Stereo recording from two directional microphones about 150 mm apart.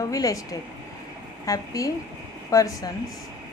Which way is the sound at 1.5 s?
20° left (ahead or behind).